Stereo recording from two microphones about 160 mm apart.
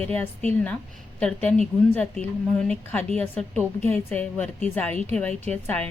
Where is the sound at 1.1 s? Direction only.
5° left (ahead or behind).